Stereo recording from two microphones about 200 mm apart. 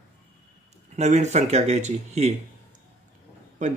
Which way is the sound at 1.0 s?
35° right (ahead or behind).